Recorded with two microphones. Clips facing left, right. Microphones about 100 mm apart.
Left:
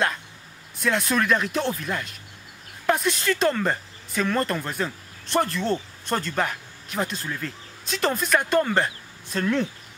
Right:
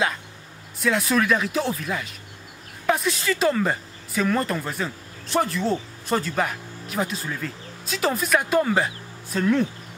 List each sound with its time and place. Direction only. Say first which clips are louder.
0.7 s speech: right 2 dB; centre (ahead or behind)